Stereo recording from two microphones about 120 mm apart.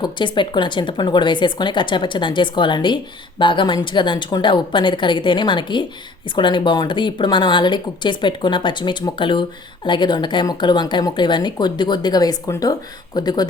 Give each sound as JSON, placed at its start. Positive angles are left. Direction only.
{"t": 0.0, "sound": "speech", "side_deg": 40}